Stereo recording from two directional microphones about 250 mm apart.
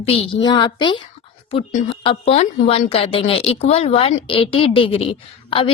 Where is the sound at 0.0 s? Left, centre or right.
Left.